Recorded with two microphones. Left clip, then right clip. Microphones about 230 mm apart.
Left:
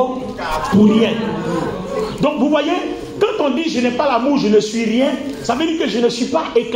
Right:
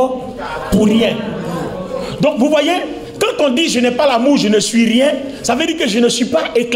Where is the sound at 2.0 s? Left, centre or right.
Right.